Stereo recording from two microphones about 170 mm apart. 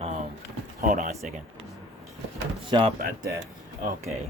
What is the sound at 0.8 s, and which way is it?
Speech, 50° right (ahead or behind).